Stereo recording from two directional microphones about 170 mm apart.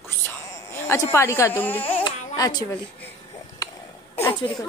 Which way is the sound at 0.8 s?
15° left (ahead or behind).